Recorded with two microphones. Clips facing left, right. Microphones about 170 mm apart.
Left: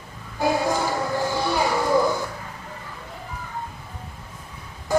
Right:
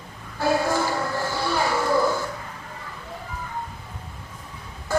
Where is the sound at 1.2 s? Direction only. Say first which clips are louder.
Left 4 dB; 15° left (ahead or behind).